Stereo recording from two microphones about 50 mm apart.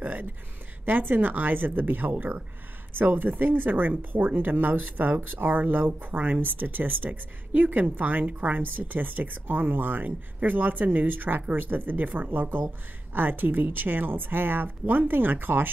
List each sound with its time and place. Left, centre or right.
0.0 s speech: right